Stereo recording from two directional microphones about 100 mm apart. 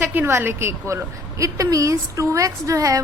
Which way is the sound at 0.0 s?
20° right (ahead or behind).